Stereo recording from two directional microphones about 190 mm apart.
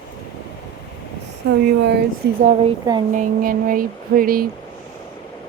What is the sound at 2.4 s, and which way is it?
Speech, 40° right (ahead or behind).